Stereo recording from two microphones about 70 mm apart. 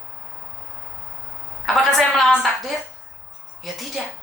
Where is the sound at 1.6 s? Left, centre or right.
Centre.